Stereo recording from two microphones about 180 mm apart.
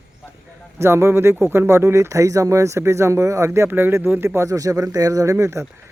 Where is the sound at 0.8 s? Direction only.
15° right (ahead or behind).